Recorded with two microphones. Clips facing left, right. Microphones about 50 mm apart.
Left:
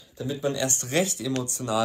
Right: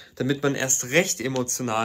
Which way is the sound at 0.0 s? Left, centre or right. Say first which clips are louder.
Right 5 dB; right.